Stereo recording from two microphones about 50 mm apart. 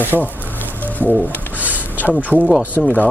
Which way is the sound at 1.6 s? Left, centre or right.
Right.